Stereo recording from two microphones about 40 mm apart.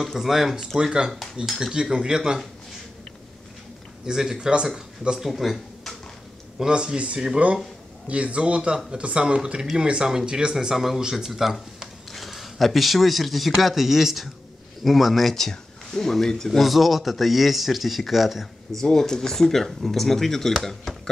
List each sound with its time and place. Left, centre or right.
0.0 s speech: centre
0.7 s speech: centre
4.0 s speech: centre
5.2 s speech: centre
6.6 s speech: right
7.4 s speech: right; by 15.3 s centre
15.3 s speech: centre
18.8 s speech: centre